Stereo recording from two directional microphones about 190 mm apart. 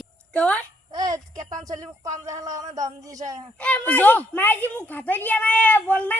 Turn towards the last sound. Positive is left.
turn(degrees=10)  # may be behind; listen again after turning